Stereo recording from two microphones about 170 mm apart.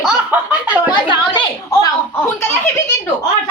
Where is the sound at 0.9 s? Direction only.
30° left (ahead or behind).